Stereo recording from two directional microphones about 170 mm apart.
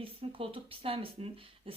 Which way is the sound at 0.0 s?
35° right (ahead or behind).